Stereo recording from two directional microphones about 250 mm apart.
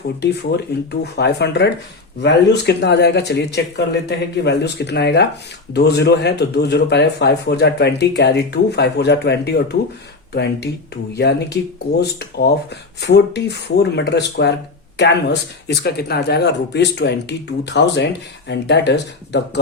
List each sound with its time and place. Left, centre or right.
0.2 s speech: left